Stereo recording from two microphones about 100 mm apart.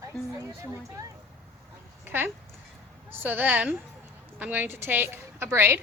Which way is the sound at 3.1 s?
20° right (ahead or behind).